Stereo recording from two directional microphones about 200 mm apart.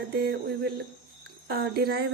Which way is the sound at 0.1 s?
50° right (ahead or behind).